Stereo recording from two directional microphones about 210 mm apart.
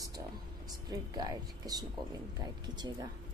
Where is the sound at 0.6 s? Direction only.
20° right (ahead or behind).